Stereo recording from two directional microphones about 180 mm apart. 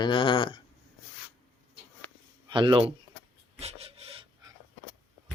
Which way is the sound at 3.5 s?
35° right (ahead or behind).